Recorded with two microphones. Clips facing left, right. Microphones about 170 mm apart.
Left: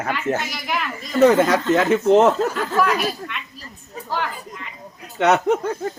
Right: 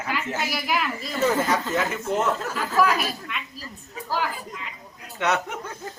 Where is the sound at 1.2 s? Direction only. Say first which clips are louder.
Left 8 dB; 75° left (ahead or behind).